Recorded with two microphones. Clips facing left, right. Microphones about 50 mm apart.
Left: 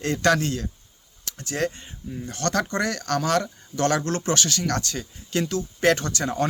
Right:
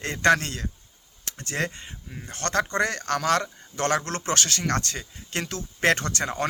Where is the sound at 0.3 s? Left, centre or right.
Right.